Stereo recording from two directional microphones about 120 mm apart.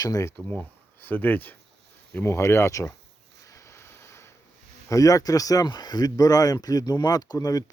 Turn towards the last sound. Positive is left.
turn(degrees=30)  # may be behind; listen again after turning